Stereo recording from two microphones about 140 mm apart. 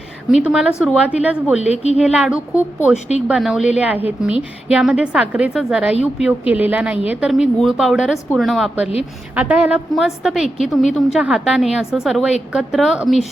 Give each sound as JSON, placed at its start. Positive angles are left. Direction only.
{"t": 0.4, "sound": "a woman's voice", "side_deg": -5}
{"t": 1.6, "sound": "a woman's voice", "side_deg": 50}
{"t": 2.0, "sound": "a woman's voice", "side_deg": -5}
{"t": 9.3, "sound": "a woman's voice", "side_deg": -10}